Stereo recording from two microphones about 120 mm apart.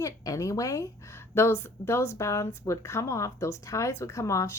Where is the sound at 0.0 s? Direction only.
30° left (ahead or behind).